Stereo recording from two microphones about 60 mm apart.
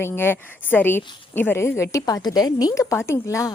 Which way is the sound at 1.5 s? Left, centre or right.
Left.